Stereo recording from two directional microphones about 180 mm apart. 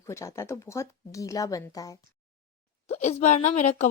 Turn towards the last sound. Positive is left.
turn(degrees=40)  # may be behind; listen again after turning